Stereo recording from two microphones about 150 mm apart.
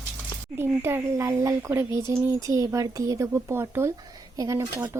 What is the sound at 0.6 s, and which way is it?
Speech, 15° right (ahead or behind).